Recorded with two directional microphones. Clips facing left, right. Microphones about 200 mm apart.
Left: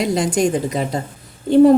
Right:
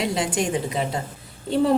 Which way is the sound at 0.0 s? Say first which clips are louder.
Left 6 dB; 40° left (ahead or behind).